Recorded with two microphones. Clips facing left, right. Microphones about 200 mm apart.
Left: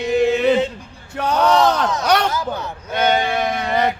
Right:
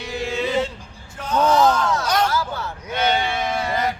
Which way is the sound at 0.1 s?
20° left (ahead or behind).